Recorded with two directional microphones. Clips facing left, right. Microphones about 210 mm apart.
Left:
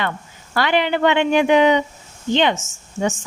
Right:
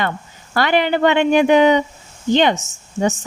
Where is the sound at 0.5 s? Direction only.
45° right (ahead or behind).